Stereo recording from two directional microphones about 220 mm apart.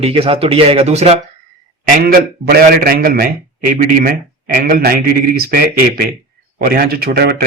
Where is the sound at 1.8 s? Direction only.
40° right (ahead or behind).